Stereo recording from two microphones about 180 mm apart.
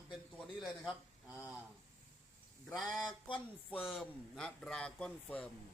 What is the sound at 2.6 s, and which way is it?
Speech, centre (ahead or behind).